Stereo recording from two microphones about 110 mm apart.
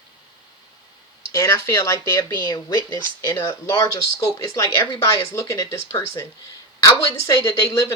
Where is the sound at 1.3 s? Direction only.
30° left (ahead or behind).